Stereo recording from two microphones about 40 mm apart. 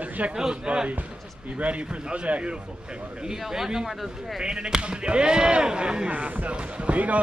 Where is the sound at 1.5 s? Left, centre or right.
Right.